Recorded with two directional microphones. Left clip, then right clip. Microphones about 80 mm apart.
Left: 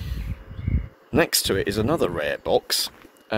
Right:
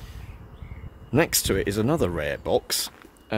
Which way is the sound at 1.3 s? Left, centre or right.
Right.